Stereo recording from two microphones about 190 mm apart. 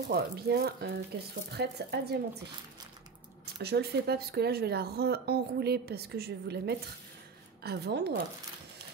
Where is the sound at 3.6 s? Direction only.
60° right (ahead or behind).